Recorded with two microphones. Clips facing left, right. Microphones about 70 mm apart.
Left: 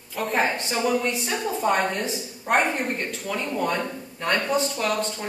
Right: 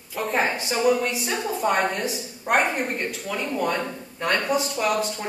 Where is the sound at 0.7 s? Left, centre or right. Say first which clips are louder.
Right 3 dB; centre.